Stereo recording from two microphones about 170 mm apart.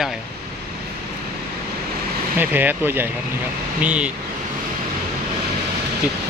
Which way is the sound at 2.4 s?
10° right (ahead or behind).